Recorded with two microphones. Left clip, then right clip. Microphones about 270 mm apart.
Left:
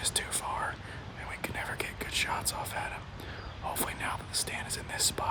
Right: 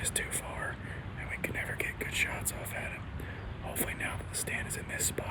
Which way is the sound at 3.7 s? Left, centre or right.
Centre.